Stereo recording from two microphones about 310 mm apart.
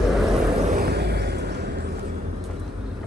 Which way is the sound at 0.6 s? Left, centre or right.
Right.